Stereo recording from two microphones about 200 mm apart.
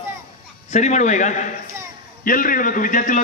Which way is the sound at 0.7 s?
35° left (ahead or behind).